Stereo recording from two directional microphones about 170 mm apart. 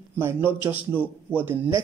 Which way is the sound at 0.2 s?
10° right (ahead or behind).